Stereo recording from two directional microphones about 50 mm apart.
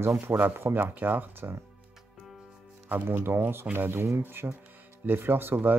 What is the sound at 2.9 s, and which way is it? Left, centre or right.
Speech, right.